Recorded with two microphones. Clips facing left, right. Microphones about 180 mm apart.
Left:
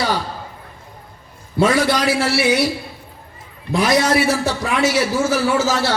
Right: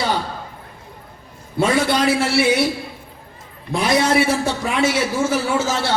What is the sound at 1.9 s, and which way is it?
Speech, 25° right (ahead or behind).